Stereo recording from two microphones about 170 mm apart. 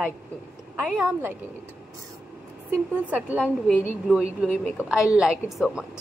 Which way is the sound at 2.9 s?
10° right (ahead or behind).